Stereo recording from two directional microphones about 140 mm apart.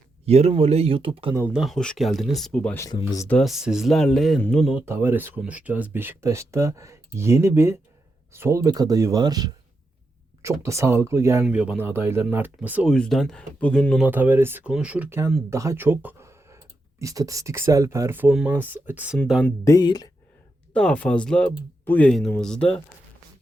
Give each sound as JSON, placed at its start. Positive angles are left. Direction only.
{"t": 0.3, "sound": "speech", "side_deg": -50}
{"t": 1.5, "sound": "speech", "side_deg": 0}
{"t": 2.7, "sound": "speech", "side_deg": 25}
{"t": 3.2, "sound": "speech", "side_deg": 0}
{"t": 4.7, "sound": "speech", "side_deg": -15}
{"t": 11.4, "sound": "speech", "side_deg": -5}
{"t": 12.9, "sound": "speech", "side_deg": 0}
{"t": 14.0, "sound": "speech", "side_deg": -10}
{"t": 19.5, "sound": "speech", "side_deg": 25}
{"t": 20.7, "sound": "speech", "side_deg": 10}